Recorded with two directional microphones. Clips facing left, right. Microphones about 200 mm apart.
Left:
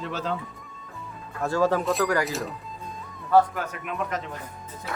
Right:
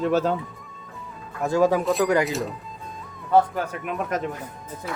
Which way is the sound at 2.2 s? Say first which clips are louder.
Right 3 dB; centre (ahead or behind).